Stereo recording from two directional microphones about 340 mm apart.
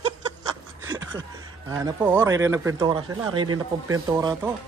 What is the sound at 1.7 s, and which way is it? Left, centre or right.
Speech, centre.